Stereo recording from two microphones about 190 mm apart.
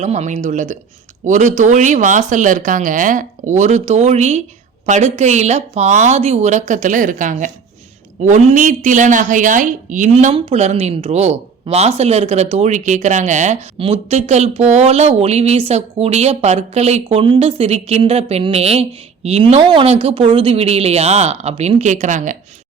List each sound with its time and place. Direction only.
0.0 s speech: 35° right (ahead or behind)